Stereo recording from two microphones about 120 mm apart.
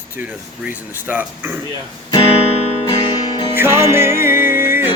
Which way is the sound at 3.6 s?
20° right (ahead or behind).